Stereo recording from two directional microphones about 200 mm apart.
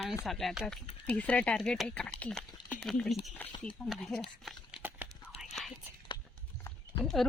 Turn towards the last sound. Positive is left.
turn(degrees=0)  # may be behind; listen again after turning